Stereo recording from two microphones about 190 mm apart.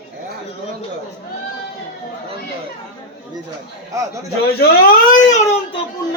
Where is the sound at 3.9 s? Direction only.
15° right (ahead or behind).